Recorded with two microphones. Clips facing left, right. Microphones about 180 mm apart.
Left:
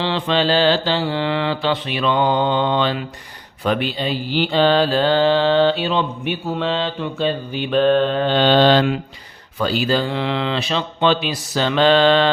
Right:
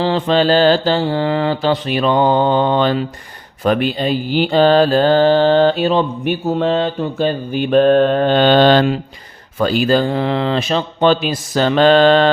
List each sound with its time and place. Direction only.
0.0 s mantra: 45° right (ahead or behind)